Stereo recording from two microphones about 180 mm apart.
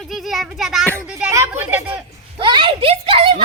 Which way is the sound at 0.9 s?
15° right (ahead or behind).